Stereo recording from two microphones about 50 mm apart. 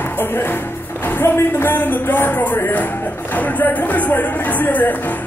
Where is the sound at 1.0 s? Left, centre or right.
Left.